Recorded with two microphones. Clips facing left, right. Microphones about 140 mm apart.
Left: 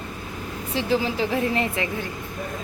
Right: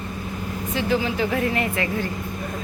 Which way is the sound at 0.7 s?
30° left (ahead or behind).